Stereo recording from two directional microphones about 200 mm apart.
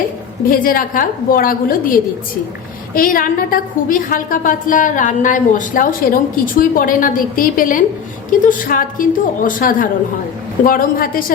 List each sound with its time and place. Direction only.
0.5 s a woman's voice: 45° left (ahead or behind)
2.9 s a woman's voice: 45° left (ahead or behind)